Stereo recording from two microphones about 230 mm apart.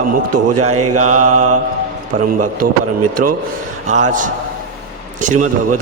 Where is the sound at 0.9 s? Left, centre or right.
Right.